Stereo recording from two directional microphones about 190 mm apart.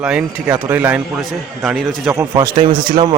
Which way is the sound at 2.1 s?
15° right (ahead or behind).